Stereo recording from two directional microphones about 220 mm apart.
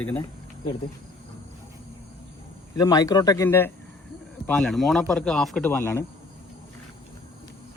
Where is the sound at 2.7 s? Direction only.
15° left (ahead or behind).